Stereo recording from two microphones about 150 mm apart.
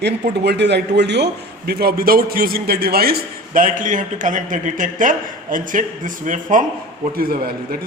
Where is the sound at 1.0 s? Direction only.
90° right.